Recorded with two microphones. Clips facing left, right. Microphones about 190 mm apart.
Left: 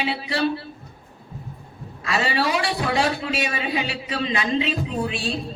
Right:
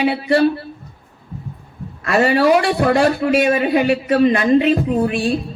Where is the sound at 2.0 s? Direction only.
55° right (ahead or behind).